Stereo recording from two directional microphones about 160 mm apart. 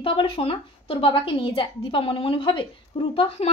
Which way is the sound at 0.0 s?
35° left (ahead or behind).